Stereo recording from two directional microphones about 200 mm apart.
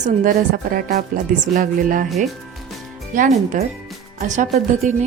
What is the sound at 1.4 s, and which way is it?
Speech, 40° right (ahead or behind).